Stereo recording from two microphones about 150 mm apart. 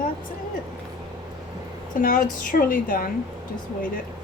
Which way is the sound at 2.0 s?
65° left (ahead or behind).